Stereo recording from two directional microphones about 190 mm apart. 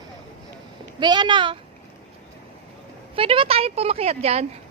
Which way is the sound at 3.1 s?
30° right (ahead or behind).